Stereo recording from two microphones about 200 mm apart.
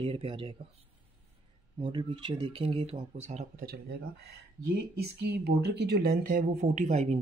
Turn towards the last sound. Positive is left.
turn(degrees=-30)  # may be behind; listen again after turning